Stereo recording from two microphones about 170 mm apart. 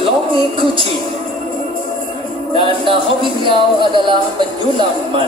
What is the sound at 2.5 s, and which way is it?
Speech, 30° right (ahead or behind).